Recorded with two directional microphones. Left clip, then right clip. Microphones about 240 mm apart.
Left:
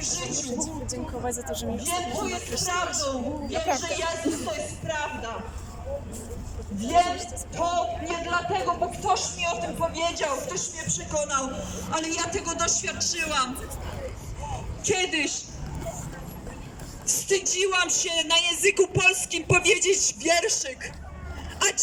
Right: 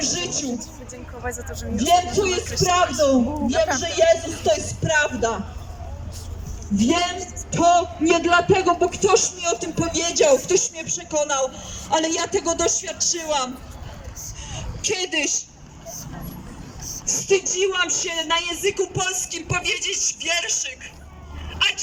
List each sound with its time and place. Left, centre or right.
0.0 s a sound: right
1.2 s speech: centre
1.8 s a man's voice: right
6.8 s a woman's voice: right
14.8 s a woman's voice: right
17.1 s speech: centre; by 20.9 s left
21.6 s dog: left